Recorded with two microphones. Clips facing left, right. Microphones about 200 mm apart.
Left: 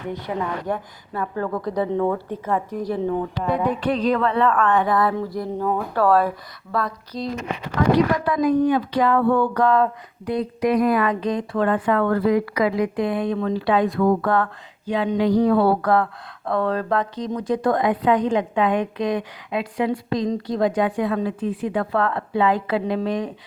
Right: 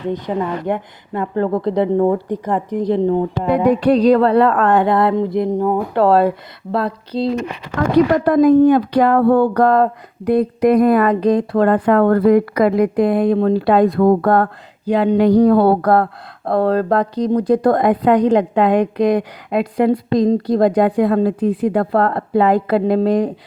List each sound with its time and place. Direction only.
0.1 s speech: 20° right (ahead or behind)
3.5 s a sound: 70° right (ahead or behind)
3.8 s speech: 35° right (ahead or behind)
7.9 s speech: 55° right (ahead or behind)
9.6 s speech: 45° right (ahead or behind)
10.2 s speech: 55° right (ahead or behind)
11.1 s speech: 40° right (ahead or behind)
11.9 s speech: 50° right (ahead or behind)
13.7 s speech: 60° right (ahead or behind)
20.3 s speech: 40° right (ahead or behind)